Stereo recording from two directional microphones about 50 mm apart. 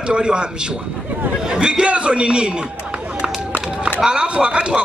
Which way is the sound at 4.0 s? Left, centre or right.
Centre.